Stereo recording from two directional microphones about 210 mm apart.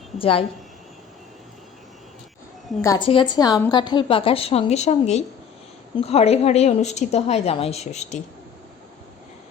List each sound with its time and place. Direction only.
0.2 s a woman's voice: 25° left (ahead or behind)
3.1 s a woman's voice: 20° left (ahead or behind)